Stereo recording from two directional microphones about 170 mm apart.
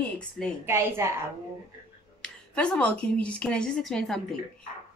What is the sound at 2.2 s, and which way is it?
A woman's voice, 5° left (ahead or behind).